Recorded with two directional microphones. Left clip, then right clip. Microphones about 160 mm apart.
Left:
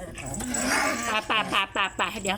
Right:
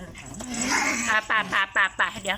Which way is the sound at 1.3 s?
15° left (ahead or behind).